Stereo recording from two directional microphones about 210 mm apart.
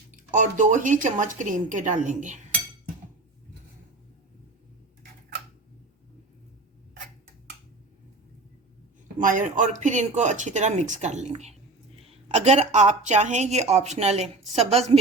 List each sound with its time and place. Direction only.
0.3 s speech: 35° right (ahead or behind)
9.1 s speech: 40° right (ahead or behind)